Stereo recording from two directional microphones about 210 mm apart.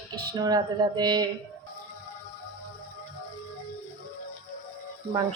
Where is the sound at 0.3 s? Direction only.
20° right (ahead or behind).